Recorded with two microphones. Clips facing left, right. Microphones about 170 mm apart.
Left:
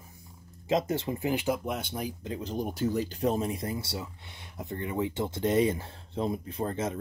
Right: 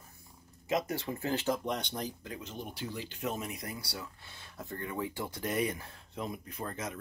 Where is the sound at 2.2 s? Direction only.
25° left (ahead or behind).